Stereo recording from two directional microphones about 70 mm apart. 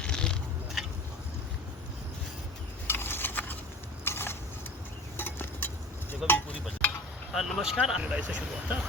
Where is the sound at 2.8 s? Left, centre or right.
Left.